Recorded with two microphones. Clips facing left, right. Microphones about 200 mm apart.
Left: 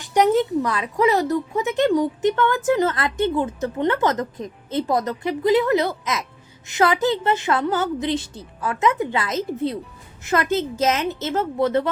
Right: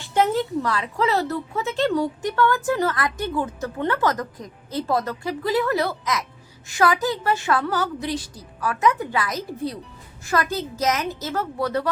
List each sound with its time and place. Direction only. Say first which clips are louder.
0.0 s a woman's voice: left 4 dB; 15° left (ahead or behind)